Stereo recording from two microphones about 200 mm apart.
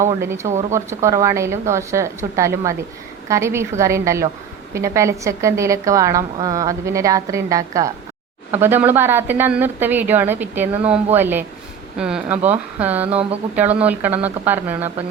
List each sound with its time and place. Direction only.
0.2 s a woman's voice: 15° right (ahead or behind)